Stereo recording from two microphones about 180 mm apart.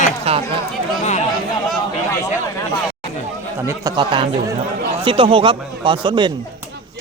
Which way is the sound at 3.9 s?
25° right (ahead or behind).